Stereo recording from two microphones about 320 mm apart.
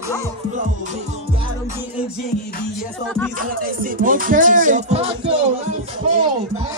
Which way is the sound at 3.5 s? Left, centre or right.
Right.